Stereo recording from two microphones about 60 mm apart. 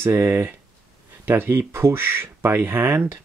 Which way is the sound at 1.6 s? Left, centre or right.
Right.